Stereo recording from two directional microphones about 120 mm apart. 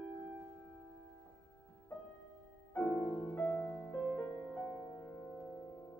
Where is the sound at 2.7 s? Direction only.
15° left (ahead or behind).